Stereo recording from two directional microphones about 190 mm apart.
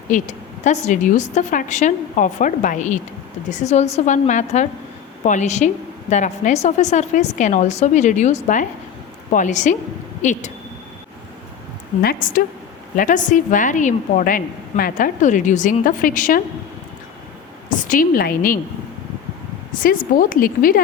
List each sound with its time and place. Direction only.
0.1 s a woman's voice: 40° left (ahead or behind)
12.0 s a woman's voice: 45° left (ahead or behind)
17.7 s a woman's voice: 45° left (ahead or behind)
19.7 s a woman's voice: 45° left (ahead or behind)